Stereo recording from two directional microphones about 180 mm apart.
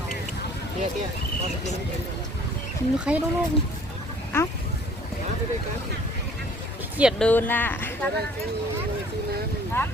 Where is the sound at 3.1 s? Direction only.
5° right (ahead or behind).